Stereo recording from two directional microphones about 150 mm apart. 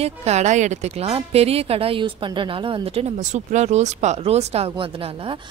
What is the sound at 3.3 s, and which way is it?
Speech, 50° right (ahead or behind).